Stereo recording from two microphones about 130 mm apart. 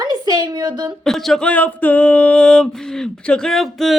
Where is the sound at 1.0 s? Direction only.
Centre (ahead or behind).